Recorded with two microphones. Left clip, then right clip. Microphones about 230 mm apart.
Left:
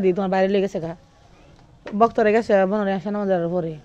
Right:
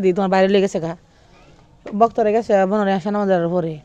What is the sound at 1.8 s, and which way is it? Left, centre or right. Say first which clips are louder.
Speech: right 1 dB; centre.